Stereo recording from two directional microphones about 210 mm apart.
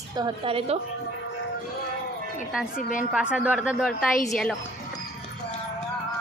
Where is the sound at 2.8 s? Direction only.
40° left (ahead or behind).